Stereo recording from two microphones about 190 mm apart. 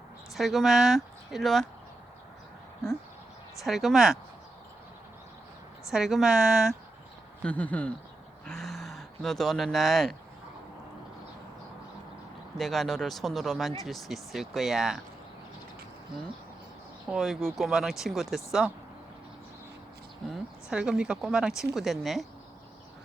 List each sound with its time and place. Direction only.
0.3 s speech: centre (ahead or behind)
3.6 s speech: centre (ahead or behind)
5.9 s speech: centre (ahead or behind)
12.5 s speech: centre (ahead or behind)
17.1 s speech: centre (ahead or behind)
20.3 s speech: 5° right (ahead or behind)